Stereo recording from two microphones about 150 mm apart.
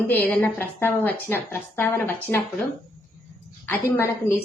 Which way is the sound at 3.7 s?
15° left (ahead or behind).